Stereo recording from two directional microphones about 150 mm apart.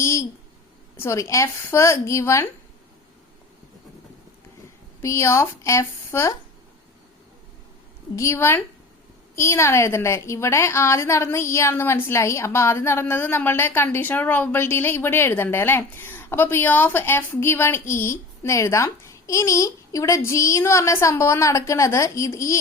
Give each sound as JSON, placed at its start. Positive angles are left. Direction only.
{"t": 0.0, "sound": "speech", "side_deg": 20}
{"t": 5.0, "sound": "speech", "side_deg": 20}
{"t": 8.1, "sound": "a woman's voice", "side_deg": 20}